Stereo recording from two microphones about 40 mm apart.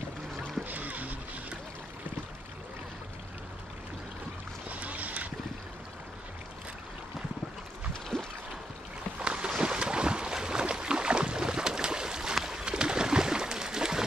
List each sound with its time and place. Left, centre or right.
0.4 s boat: right
4.6 s boat: right
9.2 s boat: right
12.4 s a sound: centre